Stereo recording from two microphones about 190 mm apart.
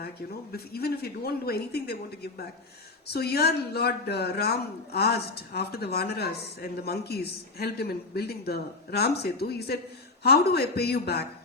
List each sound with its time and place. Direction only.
0.5 s speech: 55° left (ahead or behind)